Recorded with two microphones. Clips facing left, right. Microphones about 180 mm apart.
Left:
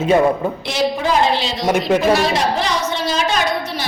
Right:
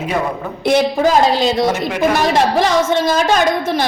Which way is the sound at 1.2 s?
40° right (ahead or behind).